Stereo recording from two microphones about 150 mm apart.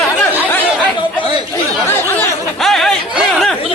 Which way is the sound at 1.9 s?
15° left (ahead or behind).